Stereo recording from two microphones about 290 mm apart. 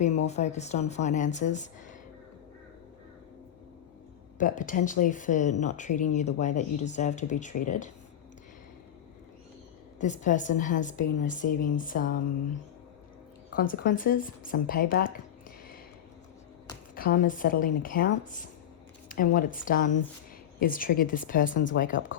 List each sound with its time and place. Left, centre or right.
0.0 s speech: left
4.4 s speech: left
10.0 s speech: left
13.6 s speech: left
16.9 s speech: left